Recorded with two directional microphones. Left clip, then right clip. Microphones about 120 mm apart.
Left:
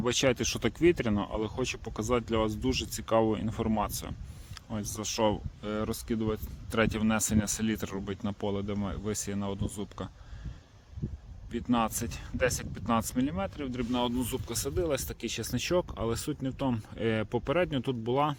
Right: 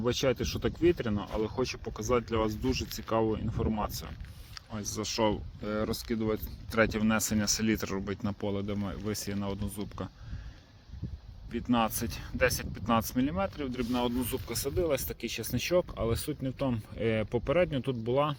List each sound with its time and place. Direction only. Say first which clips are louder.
0.0 s speech: left 2 dB; 40° left (ahead or behind)
1.3 s speech: right 1 dB; 20° left (ahead or behind)
1.8 s speech: right 1 dB; 25° left (ahead or behind)
5.6 s speech: right 1 dB; 10° left (ahead or behind)
6.7 s speech: right 1 dB; 20° left (ahead or behind)
7.4 s speech: right 3 dB; 10° left (ahead or behind)
11.5 s speech: even; centre (ahead or behind)
13.9 s speech: left 1 dB; 10° left (ahead or behind); by 18.3 s 25° left (ahead or behind)